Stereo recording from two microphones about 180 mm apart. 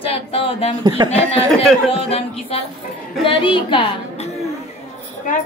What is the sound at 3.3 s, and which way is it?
Speech, 30° left (ahead or behind).